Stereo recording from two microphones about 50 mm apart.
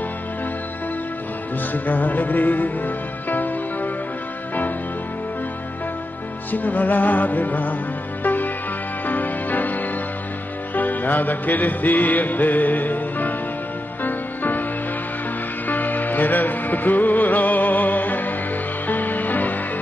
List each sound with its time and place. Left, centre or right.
1.7 s music: left
6.5 s music: left
15.6 s music: left